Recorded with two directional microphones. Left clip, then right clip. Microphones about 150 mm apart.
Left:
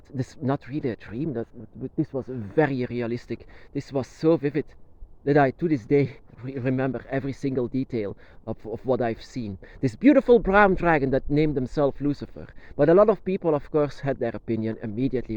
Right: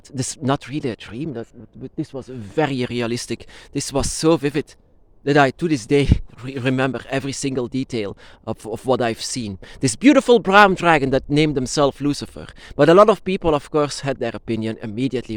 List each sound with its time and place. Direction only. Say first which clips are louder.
0.4 s speech: right 5 dB; 40° right (ahead or behind)
1.0 s speech: right 1 dB; 20° right (ahead or behind)
2.6 s speech: right 3 dB; 35° right (ahead or behind)
7.1 s speech: right 4 dB; 30° right (ahead or behind)